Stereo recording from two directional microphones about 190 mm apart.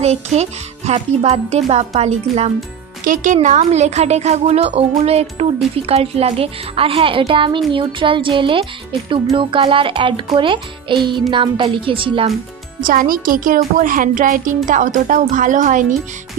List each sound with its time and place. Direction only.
0.0 s a child's voice: 35° right (ahead or behind)
12.8 s speech: 45° right (ahead or behind)